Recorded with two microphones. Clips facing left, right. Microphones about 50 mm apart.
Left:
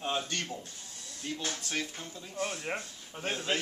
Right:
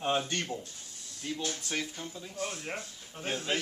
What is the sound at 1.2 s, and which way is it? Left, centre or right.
Speech, centre.